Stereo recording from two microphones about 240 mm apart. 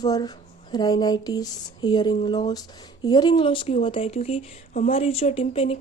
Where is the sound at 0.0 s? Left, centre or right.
Centre.